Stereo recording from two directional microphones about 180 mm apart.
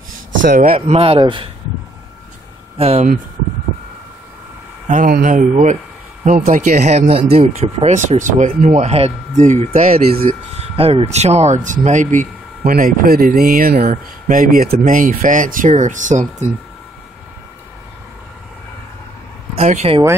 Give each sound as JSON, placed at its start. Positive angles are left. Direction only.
{"t": 0.4, "sound": "speech", "side_deg": -45}
{"t": 2.8, "sound": "speech", "side_deg": -35}
{"t": 4.8, "sound": "speech", "side_deg": -45}
{"t": 9.8, "sound": "speech", "side_deg": -50}
{"t": 10.6, "sound": "speech", "side_deg": -35}
{"t": 19.5, "sound": "speech", "side_deg": -40}